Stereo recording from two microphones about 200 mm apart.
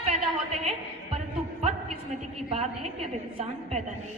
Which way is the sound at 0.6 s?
30° right (ahead or behind).